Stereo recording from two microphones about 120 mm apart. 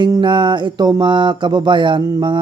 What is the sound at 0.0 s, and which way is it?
Speech, 40° right (ahead or behind).